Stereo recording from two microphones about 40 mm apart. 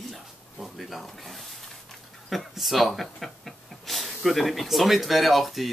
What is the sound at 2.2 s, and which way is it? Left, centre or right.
Speech, centre.